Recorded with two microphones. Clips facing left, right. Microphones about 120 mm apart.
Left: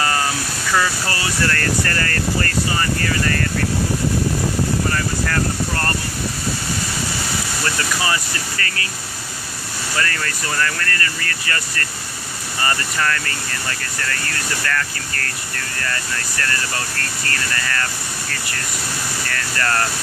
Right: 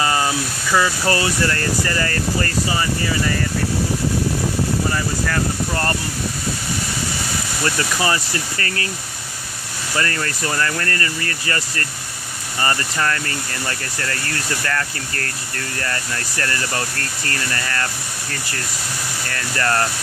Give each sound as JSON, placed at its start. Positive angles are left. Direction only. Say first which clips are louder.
{"t": 0.0, "sound": "a sound", "louder": "right 1 dB", "side_deg": -20}
{"t": 1.0, "sound": "speech", "louder": "right 3 dB", "side_deg": -30}
{"t": 7.6, "sound": "speech", "louder": "right 3 dB", "side_deg": -30}
{"t": 9.9, "sound": "speech", "louder": "right 2 dB", "side_deg": -30}
{"t": 19.2, "sound": "speech", "louder": "right 2 dB", "side_deg": -25}